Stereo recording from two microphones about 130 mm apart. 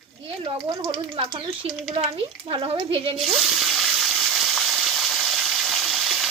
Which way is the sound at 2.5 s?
45° right (ahead or behind).